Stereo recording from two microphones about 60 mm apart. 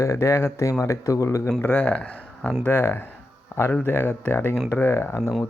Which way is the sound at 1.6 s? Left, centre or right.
Left.